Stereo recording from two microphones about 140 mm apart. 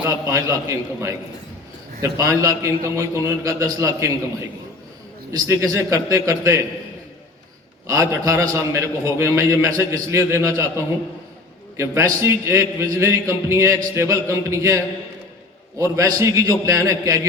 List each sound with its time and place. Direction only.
0.1 s a man's voice: 20° right (ahead or behind)
5.5 s a man's voice: 20° right (ahead or behind)
7.9 s a man's voice: 20° right (ahead or behind)
15.8 s a man's voice: 20° right (ahead or behind)